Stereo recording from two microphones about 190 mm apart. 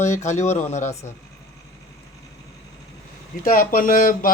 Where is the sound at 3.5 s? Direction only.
45° left (ahead or behind).